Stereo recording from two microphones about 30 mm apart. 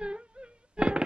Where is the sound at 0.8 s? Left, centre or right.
Right.